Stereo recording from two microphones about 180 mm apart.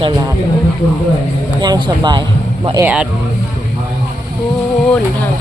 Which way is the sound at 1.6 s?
25° right (ahead or behind).